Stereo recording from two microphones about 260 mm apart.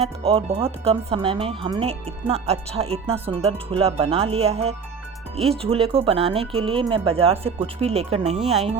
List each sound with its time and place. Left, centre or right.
0.3 s speech: right